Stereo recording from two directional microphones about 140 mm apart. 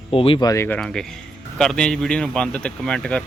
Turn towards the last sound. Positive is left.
turn(degrees=5)  # may be behind; listen again after turning